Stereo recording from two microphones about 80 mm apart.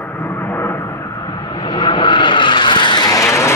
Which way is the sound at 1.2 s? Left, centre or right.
Left.